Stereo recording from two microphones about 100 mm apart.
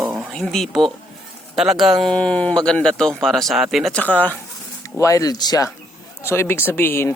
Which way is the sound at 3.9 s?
15° left (ahead or behind).